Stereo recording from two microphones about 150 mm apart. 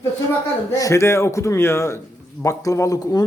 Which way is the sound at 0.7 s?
20° left (ahead or behind).